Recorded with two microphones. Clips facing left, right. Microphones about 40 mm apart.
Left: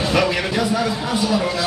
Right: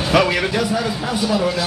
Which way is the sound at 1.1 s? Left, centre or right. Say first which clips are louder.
Right 1 dB; centre.